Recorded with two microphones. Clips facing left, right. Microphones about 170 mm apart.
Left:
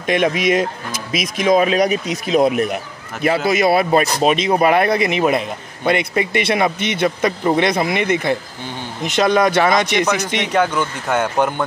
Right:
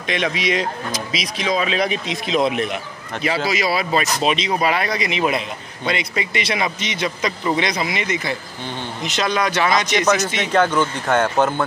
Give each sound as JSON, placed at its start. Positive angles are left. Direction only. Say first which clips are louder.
{"t": 0.0, "sound": "speech", "louder": "left 5 dB", "side_deg": 50}
{"t": 10.0, "sound": "speech", "louder": "right 1 dB", "side_deg": 10}